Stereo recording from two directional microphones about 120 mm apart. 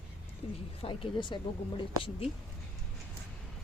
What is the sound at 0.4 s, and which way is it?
Speech, 55° left (ahead or behind).